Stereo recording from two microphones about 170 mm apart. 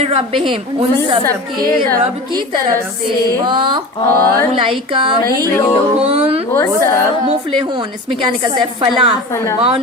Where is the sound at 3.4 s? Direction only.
30° right (ahead or behind).